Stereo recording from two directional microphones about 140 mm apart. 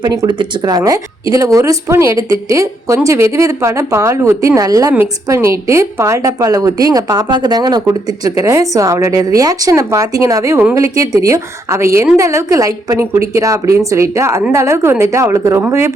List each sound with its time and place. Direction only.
0.0 s speech: 30° right (ahead or behind)